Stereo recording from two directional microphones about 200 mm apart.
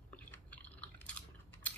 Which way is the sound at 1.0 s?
10° left (ahead or behind).